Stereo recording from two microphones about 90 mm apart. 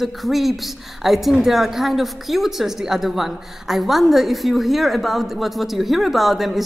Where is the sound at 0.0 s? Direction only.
Centre (ahead or behind).